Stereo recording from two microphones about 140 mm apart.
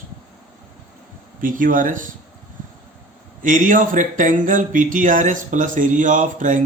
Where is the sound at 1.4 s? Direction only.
75° right (ahead or behind).